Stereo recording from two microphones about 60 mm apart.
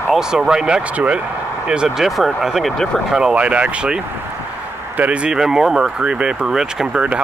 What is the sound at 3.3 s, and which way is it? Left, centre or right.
Speech, centre.